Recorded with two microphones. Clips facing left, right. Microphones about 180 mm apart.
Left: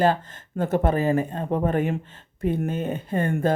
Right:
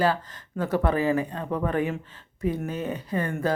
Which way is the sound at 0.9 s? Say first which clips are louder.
Left 1 dB; 45° left (ahead or behind).